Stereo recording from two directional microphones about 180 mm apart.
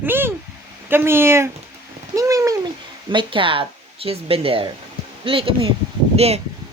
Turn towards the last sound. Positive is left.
turn(degrees=-35)  # may be behind; listen again after turning